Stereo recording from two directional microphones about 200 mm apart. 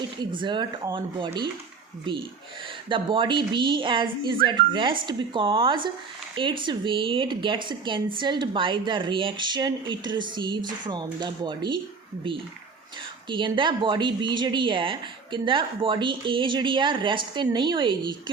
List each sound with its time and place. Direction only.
0.3 s speech: 25° right (ahead or behind)
2.9 s speech: 25° right (ahead or behind)
13.2 s speech: 25° right (ahead or behind)